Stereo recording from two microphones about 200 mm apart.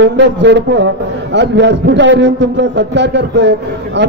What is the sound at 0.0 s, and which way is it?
A man's voice, 65° right (ahead or behind).